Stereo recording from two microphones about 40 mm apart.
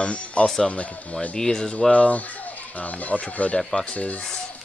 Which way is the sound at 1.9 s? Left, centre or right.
Left.